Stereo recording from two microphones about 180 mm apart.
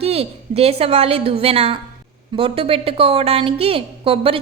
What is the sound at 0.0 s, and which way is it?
A woman's voice, 35° right (ahead or behind).